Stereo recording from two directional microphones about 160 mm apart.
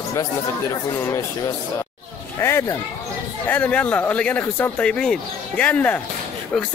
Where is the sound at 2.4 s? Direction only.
15° left (ahead or behind).